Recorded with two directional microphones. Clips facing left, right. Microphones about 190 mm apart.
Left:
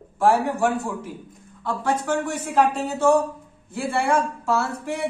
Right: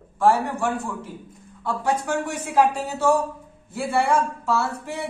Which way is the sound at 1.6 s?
15° right (ahead or behind).